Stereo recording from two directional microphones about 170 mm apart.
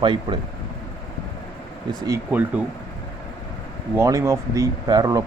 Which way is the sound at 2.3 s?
10° right (ahead or behind).